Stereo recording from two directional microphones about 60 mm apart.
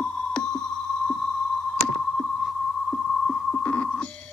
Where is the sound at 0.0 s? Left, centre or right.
Centre.